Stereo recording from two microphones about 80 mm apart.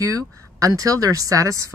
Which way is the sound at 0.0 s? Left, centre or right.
Right.